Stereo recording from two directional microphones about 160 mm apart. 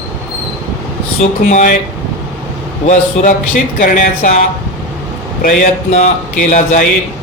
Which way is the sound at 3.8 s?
55° left (ahead or behind).